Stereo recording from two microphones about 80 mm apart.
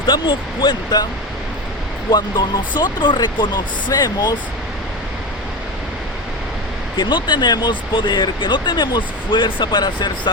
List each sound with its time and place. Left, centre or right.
0.0 s speech: left
2.0 s speech: left
6.9 s speech: left